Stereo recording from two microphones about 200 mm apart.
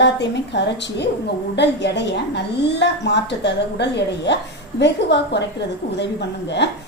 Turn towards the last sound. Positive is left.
turn(degrees=60)  # may be behind; listen again after turning